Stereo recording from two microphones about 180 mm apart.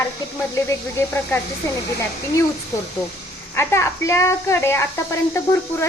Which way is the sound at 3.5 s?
15° left (ahead or behind).